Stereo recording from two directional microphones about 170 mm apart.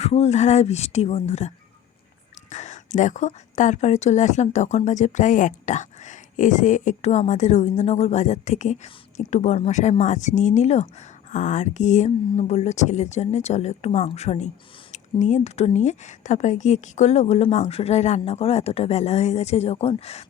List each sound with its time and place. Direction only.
0.0 s speech: 40° left (ahead or behind)